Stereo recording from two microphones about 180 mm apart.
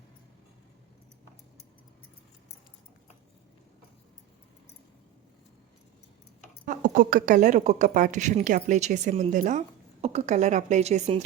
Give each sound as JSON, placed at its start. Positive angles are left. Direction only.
{"t": 6.7, "sound": "a woman's voice", "side_deg": -45}